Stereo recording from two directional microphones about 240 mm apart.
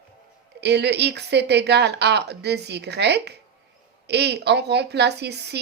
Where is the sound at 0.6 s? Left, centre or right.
Right.